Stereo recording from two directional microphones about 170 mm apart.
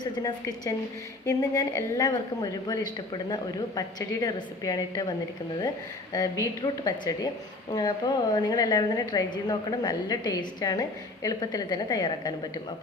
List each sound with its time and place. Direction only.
0.0 s a woman's voice: 25° left (ahead or behind)
6.4 s a woman's voice: 25° left (ahead or behind)